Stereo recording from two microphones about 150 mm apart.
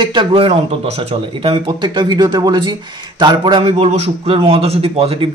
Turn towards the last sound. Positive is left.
turn(degrees=-40)  # may be behind; listen again after turning